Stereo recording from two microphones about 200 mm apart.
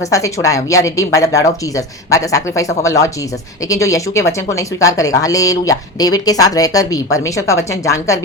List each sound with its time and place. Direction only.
0.1 s speech: 15° left (ahead or behind)